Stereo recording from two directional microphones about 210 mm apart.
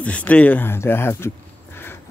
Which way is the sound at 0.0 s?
5° left (ahead or behind).